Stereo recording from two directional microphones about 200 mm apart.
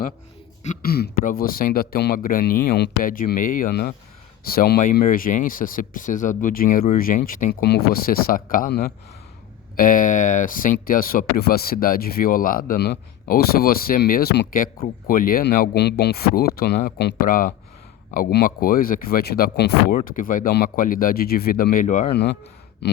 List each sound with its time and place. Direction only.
0.6 s speech: 40° left (ahead or behind)
22.1 s speech: 55° left (ahead or behind)